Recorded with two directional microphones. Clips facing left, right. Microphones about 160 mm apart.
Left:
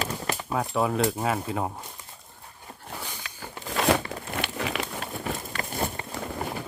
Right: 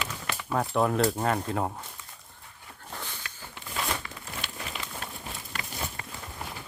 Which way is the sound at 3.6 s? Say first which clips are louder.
Left 10 dB; 90° left.